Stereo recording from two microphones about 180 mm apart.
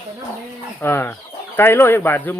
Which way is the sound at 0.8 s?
10° left (ahead or behind).